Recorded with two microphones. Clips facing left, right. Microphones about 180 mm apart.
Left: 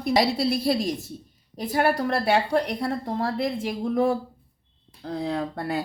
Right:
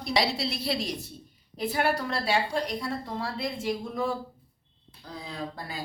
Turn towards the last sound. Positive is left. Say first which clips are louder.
# left 9 dB
turn(degrees=65)  # may be behind; listen again after turning